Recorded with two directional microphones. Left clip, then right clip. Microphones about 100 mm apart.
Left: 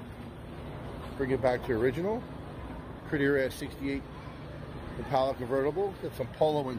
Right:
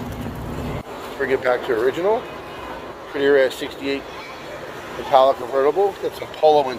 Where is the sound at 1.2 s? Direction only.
40° left (ahead or behind).